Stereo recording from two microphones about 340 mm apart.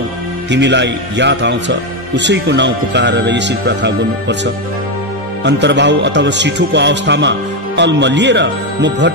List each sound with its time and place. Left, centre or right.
0.5 s a man's voice: right
5.4 s a man's voice: right